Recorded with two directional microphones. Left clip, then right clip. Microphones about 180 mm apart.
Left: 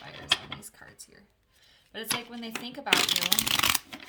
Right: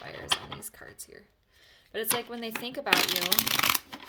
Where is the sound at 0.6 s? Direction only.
50° right (ahead or behind).